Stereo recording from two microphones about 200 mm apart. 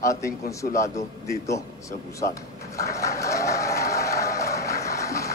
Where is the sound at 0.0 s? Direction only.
15° left (ahead or behind).